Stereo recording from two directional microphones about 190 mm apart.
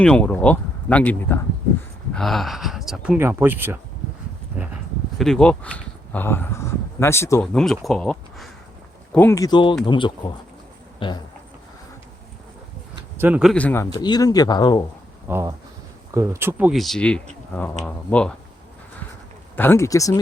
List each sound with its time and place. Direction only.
0.0 s speech: 5° left (ahead or behind); by 4.7 s 10° right (ahead or behind)
5.1 s speech: centre (ahead or behind)
7.4 s speech: centre (ahead or behind); by 11.2 s 25° left (ahead or behind)
13.1 s speech: 10° right (ahead or behind); by 13.8 s 5° left (ahead or behind)
13.9 s speech: 20° left (ahead or behind)
15.3 s speech: 15° right (ahead or behind); by 18.3 s 5° left (ahead or behind)
19.5 s speech: 10° left (ahead or behind)